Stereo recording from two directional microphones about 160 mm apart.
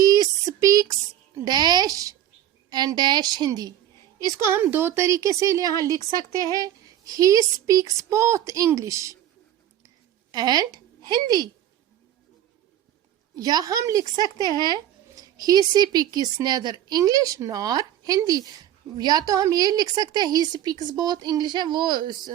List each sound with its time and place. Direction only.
0.0 s a sound: 20° right (ahead or behind)
1.5 s music: 25° right (ahead or behind)
2.6 s a woman's voice: 25° right (ahead or behind)
10.3 s a woman's voice: 25° right (ahead or behind)
13.3 s a woman's voice: 25° right (ahead or behind)
15.1 s a woman's voice: 25° right (ahead or behind)